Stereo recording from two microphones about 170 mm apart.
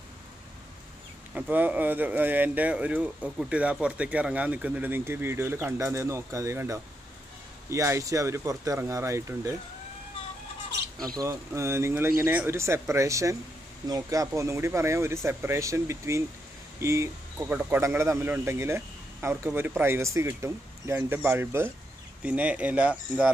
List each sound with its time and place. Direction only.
1.3 s speech: 10° right (ahead or behind)
11.1 s speech: 15° right (ahead or behind)